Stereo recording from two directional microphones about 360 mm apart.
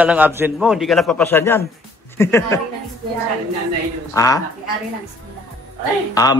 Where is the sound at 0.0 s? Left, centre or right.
Centre.